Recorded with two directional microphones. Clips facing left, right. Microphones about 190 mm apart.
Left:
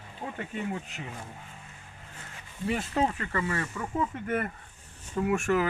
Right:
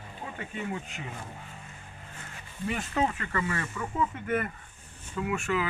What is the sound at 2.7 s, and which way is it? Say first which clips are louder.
Speech: left 1 dB; 30° left (ahead or behind).